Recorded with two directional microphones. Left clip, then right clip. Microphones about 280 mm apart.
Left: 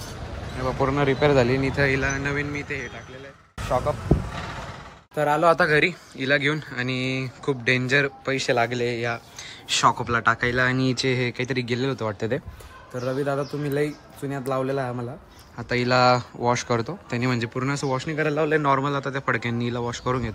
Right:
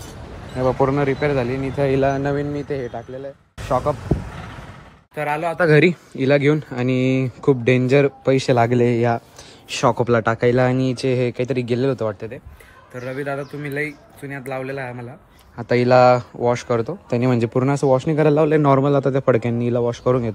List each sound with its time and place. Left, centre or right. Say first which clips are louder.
0.6 s speech: right 5 dB; centre
5.7 s speech: right 6 dB; centre
10.8 s speech: right 4 dB; centre
12.9 s speech: even; centre
15.5 s speech: right 7 dB; centre
18.1 s a man's voice: right 7 dB; right
18.5 s speech: right 5 dB; centre